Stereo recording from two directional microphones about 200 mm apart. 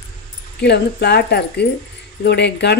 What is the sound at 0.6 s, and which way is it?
A woman's voice, 55° left (ahead or behind).